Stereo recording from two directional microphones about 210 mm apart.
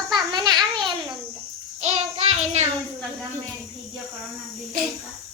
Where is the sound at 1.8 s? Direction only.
30° right (ahead or behind).